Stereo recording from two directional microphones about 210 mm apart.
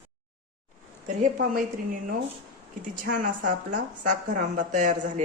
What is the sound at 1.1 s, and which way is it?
Speech, 40° right (ahead or behind).